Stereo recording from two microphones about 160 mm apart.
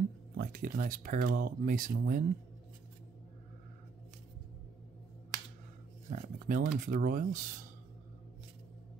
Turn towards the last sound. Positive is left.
turn(degrees=-55)  # may be behind; listen again after turning